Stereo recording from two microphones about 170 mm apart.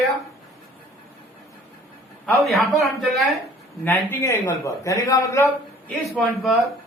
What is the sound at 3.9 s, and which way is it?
A man's voice, 15° left (ahead or behind).